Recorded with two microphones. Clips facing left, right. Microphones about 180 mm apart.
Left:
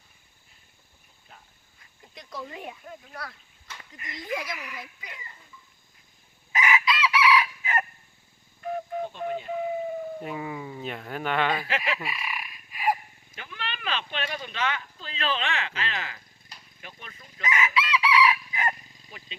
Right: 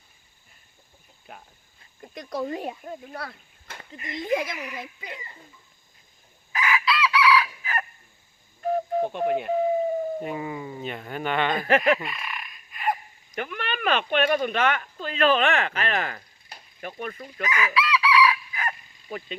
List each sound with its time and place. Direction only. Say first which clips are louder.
1.3 s a sound: right 8 dB; 60° right (ahead or behind)
2.0 s speech: right 9 dB; 50° right (ahead or behind); by 5.2 s 30° right (ahead or behind)
6.5 s chicken: even; 20° left (ahead or behind)
8.6 s whistle: right 6 dB; 40° right (ahead or behind)
9.0 s speech: right 7 dB; 60° right (ahead or behind)
9.5 s a sound: right 6 dB; 35° right (ahead or behind)
10.2 s speech: right 2 dB; centre (ahead or behind)
11.9 s fowl: even; 5° left (ahead or behind)
13.3 s speech: right 8 dB; 60° right (ahead or behind)
17.4 s chicken: right 2 dB; 25° left (ahead or behind)